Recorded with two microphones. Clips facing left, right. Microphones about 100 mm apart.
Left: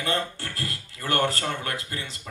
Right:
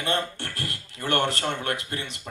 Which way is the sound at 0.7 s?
25° right (ahead or behind).